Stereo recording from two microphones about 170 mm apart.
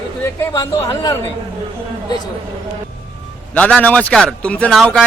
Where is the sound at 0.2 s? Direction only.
15° left (ahead or behind).